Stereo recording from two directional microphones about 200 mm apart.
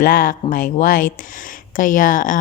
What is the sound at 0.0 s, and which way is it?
A woman's voice, 45° left (ahead or behind).